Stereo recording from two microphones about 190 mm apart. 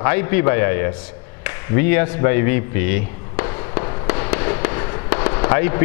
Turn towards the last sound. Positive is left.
turn(degrees=15)  # may be behind; listen again after turning